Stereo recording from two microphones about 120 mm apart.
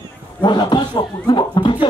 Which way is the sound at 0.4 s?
40° left (ahead or behind).